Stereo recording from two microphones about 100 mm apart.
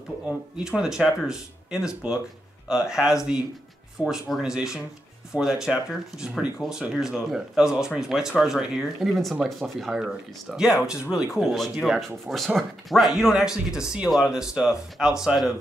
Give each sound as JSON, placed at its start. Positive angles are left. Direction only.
{"t": 0.3, "sound": "speech", "side_deg": -5}